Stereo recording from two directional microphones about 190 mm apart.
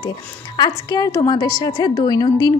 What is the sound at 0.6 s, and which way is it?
A woman's voice, 20° left (ahead or behind).